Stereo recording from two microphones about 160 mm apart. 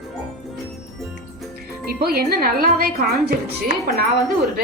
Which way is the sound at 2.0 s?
70° right (ahead or behind).